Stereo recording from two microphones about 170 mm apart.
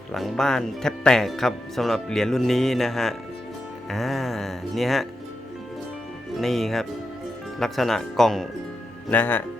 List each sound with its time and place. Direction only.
0.1 s speech: centre (ahead or behind)
6.3 s speech: centre (ahead or behind)